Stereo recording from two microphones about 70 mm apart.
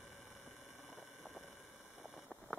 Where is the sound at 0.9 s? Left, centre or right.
Centre.